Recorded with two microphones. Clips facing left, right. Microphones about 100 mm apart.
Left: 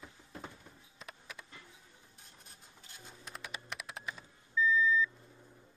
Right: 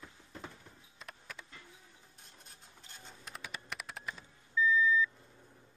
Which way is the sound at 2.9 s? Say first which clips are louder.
Even; centre (ahead or behind).